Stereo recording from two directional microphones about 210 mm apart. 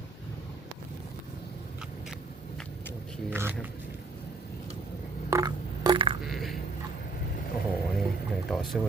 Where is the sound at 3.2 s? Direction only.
10° right (ahead or behind).